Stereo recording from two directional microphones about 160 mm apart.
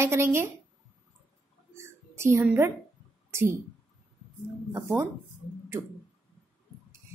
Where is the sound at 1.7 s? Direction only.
15° right (ahead or behind).